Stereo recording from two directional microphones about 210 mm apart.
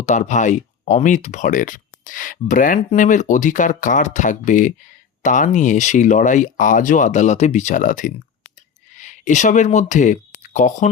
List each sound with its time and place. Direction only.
0.0 s speech: 35° left (ahead or behind)